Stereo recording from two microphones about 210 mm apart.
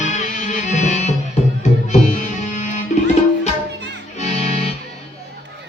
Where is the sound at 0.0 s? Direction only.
35° left (ahead or behind).